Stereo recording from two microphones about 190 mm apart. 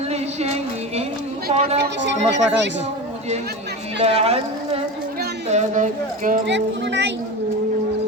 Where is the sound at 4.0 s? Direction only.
35° right (ahead or behind).